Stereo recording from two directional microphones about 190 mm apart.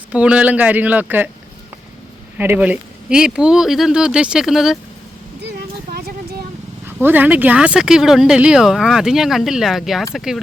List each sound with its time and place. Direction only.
0.1 s speech: 5° right (ahead or behind)
2.4 s speech: 10° right (ahead or behind)
5.4 s a sound: 55° right (ahead or behind)
6.8 s speech: 10° right (ahead or behind)